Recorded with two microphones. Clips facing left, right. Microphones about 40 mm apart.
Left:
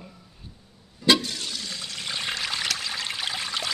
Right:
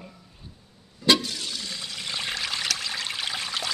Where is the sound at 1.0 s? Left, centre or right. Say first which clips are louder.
Left 1 dB; centre.